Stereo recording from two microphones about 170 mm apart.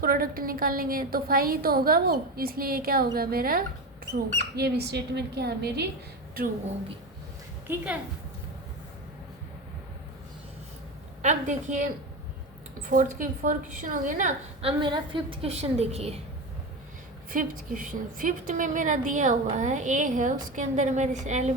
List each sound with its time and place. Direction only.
0.0 s a woman's voice: 60° right (ahead or behind)
4.5 s a woman's voice: 70° right (ahead or behind)
7.7 s a woman's voice: 10° right (ahead or behind)
11.2 s a woman's voice: 45° right (ahead or behind)
12.9 s a woman's voice: 50° right (ahead or behind)
14.6 s a woman's voice: 30° right (ahead or behind)
17.3 s a woman's voice: 55° right (ahead or behind)